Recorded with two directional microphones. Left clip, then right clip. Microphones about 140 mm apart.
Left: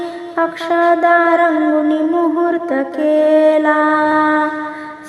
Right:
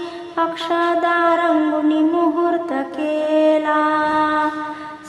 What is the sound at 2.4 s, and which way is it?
Mantra, 25° left (ahead or behind).